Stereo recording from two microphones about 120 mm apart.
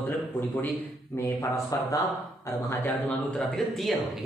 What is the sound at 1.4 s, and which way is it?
Speech, 30° left (ahead or behind).